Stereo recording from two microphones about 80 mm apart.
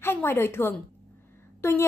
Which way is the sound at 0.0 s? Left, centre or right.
Left.